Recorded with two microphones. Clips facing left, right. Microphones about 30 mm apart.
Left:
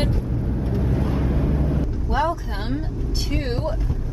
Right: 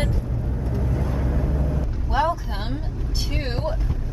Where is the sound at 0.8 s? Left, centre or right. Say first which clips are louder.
Left 3 dB; centre.